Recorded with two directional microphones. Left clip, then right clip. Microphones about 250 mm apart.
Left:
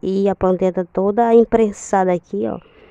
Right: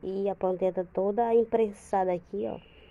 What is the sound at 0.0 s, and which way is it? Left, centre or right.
Speech, left.